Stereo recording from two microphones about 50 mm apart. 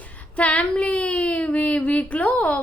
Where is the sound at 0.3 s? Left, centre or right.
Left.